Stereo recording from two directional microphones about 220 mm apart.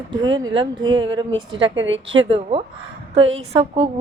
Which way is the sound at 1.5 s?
60° right (ahead or behind).